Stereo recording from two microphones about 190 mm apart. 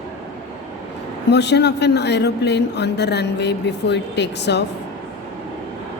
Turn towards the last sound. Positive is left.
turn(degrees=65)  # may be behind; listen again after turning